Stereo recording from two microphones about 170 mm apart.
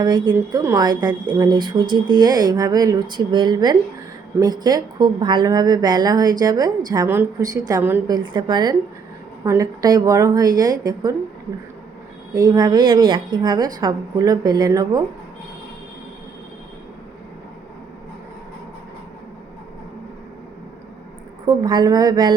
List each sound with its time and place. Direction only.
0.0 s speech: 25° right (ahead or behind)
8.0 s speech: 25° right (ahead or behind)
12.3 s speech: 20° right (ahead or behind)
21.4 s speech: 25° right (ahead or behind)